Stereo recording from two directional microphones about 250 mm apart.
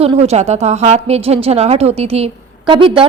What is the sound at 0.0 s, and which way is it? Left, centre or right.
A woman's voice, right.